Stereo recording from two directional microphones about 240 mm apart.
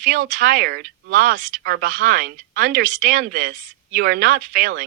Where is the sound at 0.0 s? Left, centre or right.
Right.